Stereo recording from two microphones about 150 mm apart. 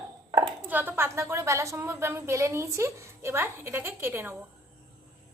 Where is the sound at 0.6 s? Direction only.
10° right (ahead or behind).